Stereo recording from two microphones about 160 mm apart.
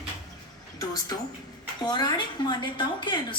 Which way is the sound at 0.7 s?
25° left (ahead or behind).